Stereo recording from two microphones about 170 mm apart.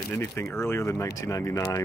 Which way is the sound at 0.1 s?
15° left (ahead or behind).